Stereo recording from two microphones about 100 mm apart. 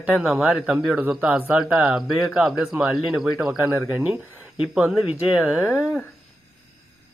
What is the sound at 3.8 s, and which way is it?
Speech, 20° right (ahead or behind).